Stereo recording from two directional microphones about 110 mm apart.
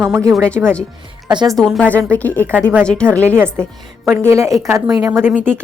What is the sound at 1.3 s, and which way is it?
Speech, 40° right (ahead or behind).